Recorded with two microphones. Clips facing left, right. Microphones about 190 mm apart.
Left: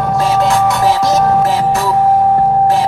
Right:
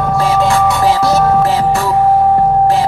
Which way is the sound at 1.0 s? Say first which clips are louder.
Even; 15° left (ahead or behind).